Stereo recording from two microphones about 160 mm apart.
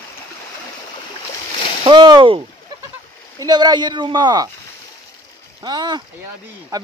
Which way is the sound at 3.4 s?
25° right (ahead or behind).